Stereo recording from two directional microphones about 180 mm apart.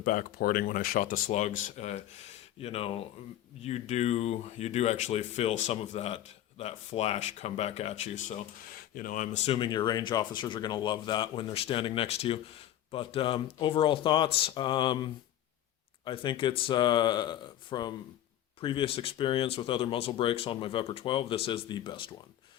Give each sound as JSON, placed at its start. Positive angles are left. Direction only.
{"t": 0.0, "sound": "speech", "side_deg": 50}
{"t": 8.7, "sound": "speech", "side_deg": 50}